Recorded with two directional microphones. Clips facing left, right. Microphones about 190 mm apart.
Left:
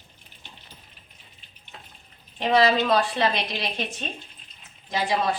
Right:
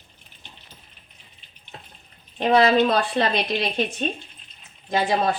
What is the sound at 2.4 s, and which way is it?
Speech, 50° right (ahead or behind).